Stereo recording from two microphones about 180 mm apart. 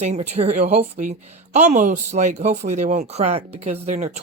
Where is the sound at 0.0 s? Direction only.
35° right (ahead or behind).